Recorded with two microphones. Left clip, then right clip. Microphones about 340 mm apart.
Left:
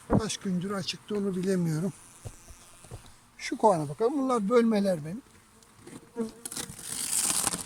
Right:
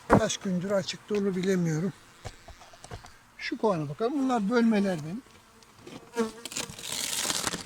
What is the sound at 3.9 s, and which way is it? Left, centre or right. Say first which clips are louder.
Speech: left 1 dB; centre.